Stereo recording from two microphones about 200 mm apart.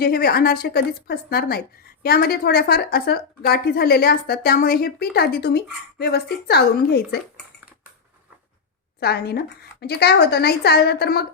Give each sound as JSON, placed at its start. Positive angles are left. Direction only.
{"t": 0.0, "sound": "a woman's voice", "side_deg": 50}
{"t": 9.0, "sound": "a woman's voice", "side_deg": 55}